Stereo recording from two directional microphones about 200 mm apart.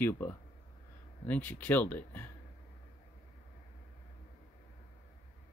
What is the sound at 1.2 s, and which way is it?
Speech, 10° left (ahead or behind).